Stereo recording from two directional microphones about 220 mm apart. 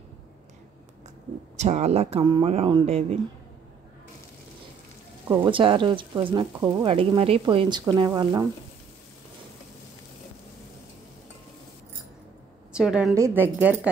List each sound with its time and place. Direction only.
1.6 s speech: 30° right (ahead or behind)
5.3 s speech: 20° right (ahead or behind)
12.7 s a woman's voice: 5° right (ahead or behind)